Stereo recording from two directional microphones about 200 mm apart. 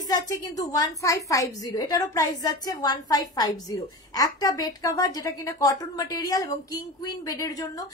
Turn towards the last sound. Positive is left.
turn(degrees=20)  # may be behind; listen again after turning